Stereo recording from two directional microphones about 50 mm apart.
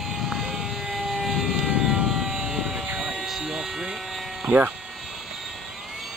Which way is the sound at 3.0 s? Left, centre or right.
Centre.